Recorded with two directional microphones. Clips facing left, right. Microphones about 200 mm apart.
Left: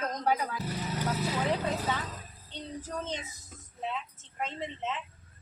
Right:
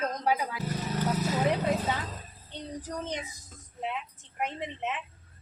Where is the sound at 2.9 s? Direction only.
15° right (ahead or behind).